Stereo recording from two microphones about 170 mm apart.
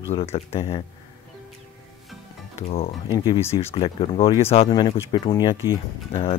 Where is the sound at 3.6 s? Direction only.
35° left (ahead or behind).